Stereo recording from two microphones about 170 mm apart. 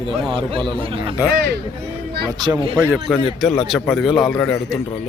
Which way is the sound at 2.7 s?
15° right (ahead or behind).